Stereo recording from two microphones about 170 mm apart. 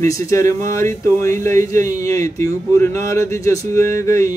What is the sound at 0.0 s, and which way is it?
Speech, 15° left (ahead or behind).